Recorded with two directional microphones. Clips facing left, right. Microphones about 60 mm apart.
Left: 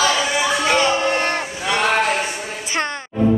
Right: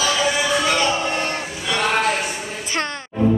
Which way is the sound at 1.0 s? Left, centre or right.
Left.